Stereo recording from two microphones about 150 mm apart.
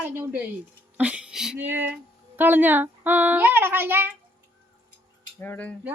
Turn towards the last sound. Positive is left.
turn(degrees=10)  # may be behind; listen again after turning